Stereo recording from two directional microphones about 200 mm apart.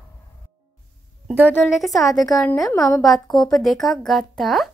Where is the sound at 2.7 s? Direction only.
15° left (ahead or behind).